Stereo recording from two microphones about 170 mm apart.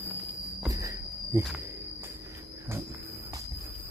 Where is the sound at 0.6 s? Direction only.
20° right (ahead or behind).